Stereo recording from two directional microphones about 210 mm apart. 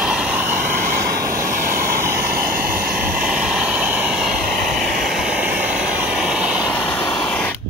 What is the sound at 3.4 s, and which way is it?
Vehicle, 5° right (ahead or behind).